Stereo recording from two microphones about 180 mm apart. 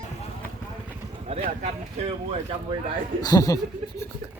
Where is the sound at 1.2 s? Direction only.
35° right (ahead or behind).